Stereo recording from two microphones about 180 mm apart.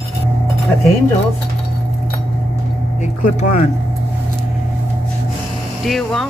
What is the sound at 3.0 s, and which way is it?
Speech, 40° left (ahead or behind).